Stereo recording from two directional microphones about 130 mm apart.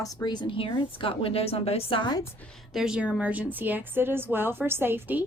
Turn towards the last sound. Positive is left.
turn(degrees=-15)  # may be behind; listen again after turning